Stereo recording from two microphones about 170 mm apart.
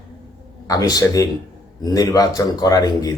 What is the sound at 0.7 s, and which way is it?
Speech, 20° left (ahead or behind).